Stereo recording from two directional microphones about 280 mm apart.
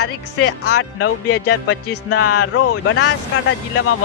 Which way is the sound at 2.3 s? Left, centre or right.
Left.